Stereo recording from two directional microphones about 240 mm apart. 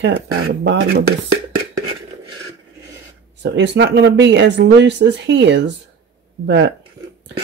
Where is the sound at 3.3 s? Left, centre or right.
Right.